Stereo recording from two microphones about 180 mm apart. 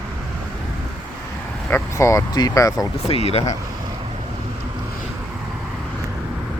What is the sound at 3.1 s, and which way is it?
Speech, 35° left (ahead or behind).